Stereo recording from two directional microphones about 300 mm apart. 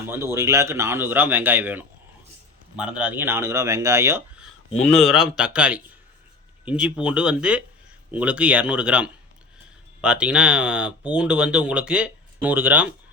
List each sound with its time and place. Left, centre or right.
0.0 s a man's voice: centre